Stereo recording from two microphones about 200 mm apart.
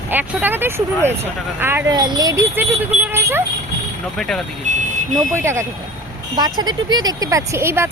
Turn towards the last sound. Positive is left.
turn(degrees=-15)  # may be behind; listen again after turning